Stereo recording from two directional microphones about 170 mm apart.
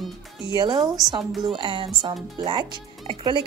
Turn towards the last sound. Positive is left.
turn(degrees=-30)  # may be behind; listen again after turning